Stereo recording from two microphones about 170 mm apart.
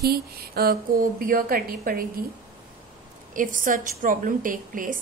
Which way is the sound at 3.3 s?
50° right (ahead or behind).